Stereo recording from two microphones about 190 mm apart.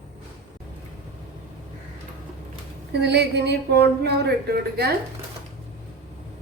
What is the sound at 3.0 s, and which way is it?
A woman's voice, 60° right (ahead or behind).